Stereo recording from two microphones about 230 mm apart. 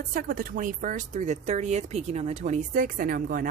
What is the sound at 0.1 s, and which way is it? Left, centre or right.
Speech, right.